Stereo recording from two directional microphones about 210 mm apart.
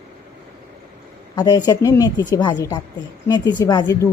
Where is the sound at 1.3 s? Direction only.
20° left (ahead or behind).